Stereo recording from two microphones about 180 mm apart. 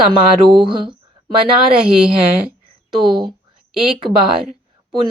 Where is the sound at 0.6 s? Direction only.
25° right (ahead or behind).